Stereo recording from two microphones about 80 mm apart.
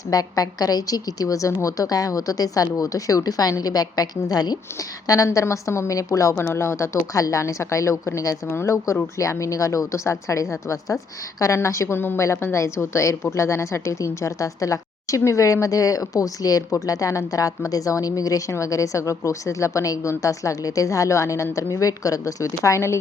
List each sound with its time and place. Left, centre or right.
0.1 s a woman's voice: left
6.3 s a woman's voice: left